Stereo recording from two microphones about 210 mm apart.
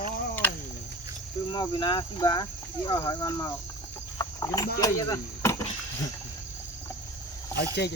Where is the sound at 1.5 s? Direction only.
20° left (ahead or behind).